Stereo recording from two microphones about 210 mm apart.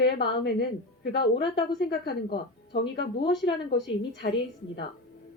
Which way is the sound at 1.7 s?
50° left (ahead or behind).